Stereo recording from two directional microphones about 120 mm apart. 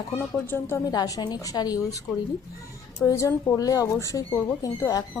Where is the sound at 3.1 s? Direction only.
25° left (ahead or behind).